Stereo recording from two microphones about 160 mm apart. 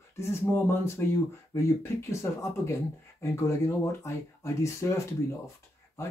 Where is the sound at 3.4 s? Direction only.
20° left (ahead or behind).